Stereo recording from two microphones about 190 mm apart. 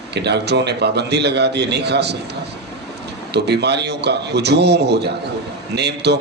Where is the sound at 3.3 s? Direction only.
60° right (ahead or behind).